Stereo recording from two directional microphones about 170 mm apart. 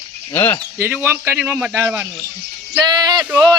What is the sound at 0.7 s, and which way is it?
Speech, 15° right (ahead or behind).